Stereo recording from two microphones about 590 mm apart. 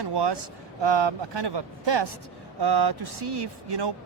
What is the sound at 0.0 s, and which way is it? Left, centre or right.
Speech, right.